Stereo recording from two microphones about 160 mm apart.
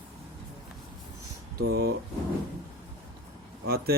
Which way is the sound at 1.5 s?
75° right (ahead or behind).